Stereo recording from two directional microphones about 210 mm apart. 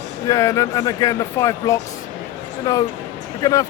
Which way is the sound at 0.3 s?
15° left (ahead or behind).